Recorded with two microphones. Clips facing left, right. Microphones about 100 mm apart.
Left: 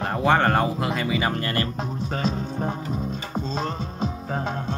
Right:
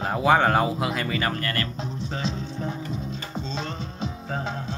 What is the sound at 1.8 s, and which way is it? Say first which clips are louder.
Music: left 3 dB; 50° left (ahead or behind).